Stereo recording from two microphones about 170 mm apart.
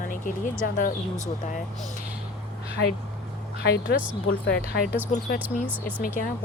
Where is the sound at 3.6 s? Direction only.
65° left (ahead or behind).